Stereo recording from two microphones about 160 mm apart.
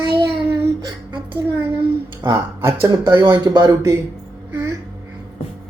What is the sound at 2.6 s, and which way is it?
Speech, 15° right (ahead or behind).